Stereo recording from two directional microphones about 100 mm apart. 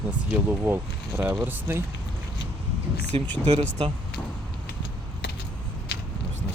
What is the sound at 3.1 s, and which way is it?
Speech, 65° right (ahead or behind).